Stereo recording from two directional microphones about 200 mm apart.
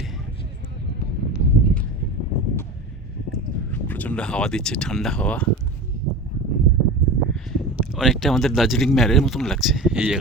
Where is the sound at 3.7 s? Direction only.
10° left (ahead or behind).